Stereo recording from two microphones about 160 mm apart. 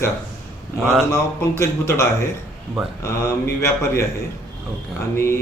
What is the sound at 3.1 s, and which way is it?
Speech, 15° left (ahead or behind).